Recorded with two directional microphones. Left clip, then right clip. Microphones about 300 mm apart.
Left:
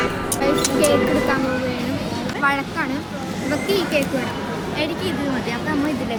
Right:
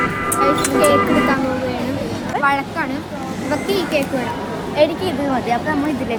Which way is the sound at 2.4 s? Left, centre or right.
Centre.